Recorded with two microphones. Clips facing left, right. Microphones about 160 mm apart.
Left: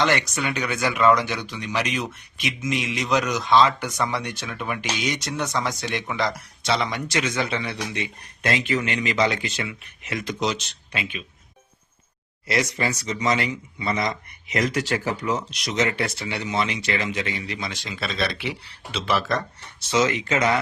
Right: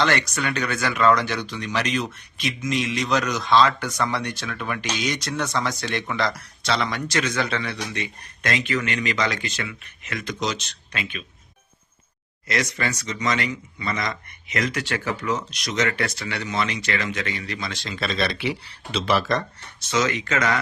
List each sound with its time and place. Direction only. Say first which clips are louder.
0.0 s speech: even; 20° left (ahead or behind)
10.5 s speech: left 1 dB; 25° left (ahead or behind)
12.5 s speech: left 2 dB; 25° left (ahead or behind)
15.2 s speech: even; 25° left (ahead or behind); by 18.1 s 10° left (ahead or behind)
19.9 s speech: left 2 dB; 25° left (ahead or behind)